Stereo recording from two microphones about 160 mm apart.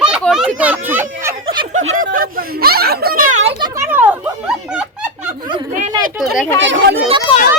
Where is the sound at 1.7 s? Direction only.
50° right (ahead or behind).